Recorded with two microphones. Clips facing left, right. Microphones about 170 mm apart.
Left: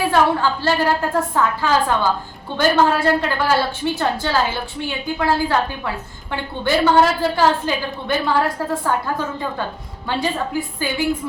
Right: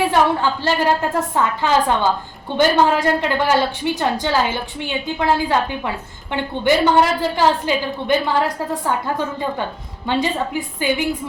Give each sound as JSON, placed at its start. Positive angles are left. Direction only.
{"t": 0.1, "sound": "a woman's voice", "side_deg": -20}